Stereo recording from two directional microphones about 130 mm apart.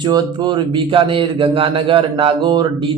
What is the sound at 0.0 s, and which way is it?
Speech, 35° right (ahead or behind).